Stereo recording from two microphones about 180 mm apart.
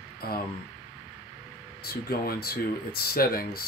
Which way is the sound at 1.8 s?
60° left (ahead or behind).